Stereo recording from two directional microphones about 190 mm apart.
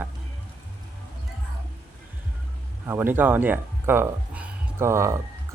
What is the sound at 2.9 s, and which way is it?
Speech, 10° right (ahead or behind).